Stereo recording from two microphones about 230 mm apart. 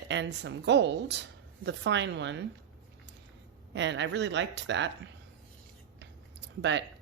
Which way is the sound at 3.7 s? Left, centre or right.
Right.